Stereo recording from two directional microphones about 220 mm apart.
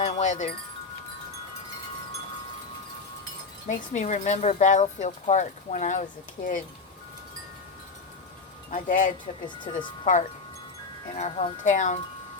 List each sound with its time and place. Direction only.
0.0 s wind chime: 35° left (ahead or behind)
3.7 s speech: 35° left (ahead or behind)
8.7 s speech: 35° left (ahead or behind)